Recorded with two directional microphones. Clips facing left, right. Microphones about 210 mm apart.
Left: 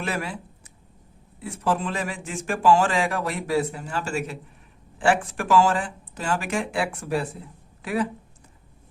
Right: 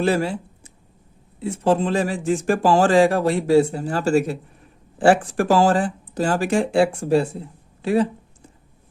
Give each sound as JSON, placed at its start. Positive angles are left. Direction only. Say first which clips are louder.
{"t": 0.0, "sound": "speech", "louder": "right 9 dB", "side_deg": -30}